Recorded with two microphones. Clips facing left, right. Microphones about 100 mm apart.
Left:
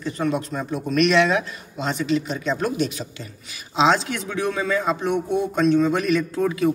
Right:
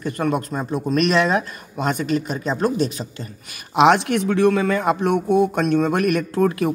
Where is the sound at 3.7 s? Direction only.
60° right (ahead or behind).